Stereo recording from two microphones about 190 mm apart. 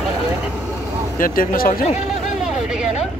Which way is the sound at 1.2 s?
50° left (ahead or behind).